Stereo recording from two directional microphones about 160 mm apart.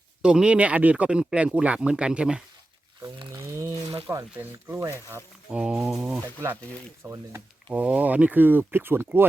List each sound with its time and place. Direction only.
0.2 s speech: 5° right (ahead or behind)
3.3 s a sound: 15° right (ahead or behind)
4.0 s speech: 15° right (ahead or behind)
5.5 s speech: 5° right (ahead or behind)
7.0 s speech: 15° right (ahead or behind)